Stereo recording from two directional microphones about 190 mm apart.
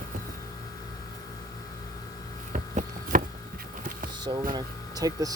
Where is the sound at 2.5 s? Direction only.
45° right (ahead or behind).